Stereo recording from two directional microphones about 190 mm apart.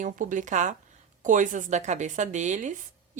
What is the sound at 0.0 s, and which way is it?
A woman's voice, 45° right (ahead or behind).